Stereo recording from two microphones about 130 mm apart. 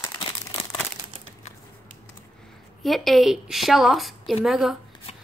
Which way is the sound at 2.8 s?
Centre (ahead or behind).